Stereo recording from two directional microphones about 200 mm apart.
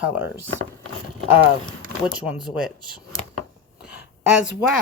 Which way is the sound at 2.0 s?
5° right (ahead or behind).